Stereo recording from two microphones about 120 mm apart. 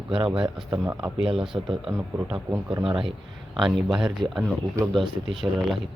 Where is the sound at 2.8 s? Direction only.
50° right (ahead or behind).